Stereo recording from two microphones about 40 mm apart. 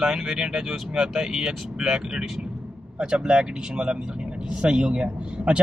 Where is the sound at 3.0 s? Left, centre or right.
Right.